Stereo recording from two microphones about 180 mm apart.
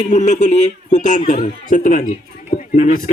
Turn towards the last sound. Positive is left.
turn(degrees=45)  # may be behind; listen again after turning